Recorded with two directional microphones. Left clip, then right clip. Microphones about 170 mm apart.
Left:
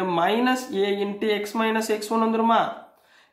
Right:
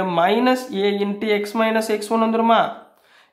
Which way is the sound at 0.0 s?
30° right (ahead or behind).